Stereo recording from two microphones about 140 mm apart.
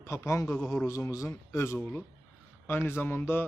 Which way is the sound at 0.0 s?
20° left (ahead or behind).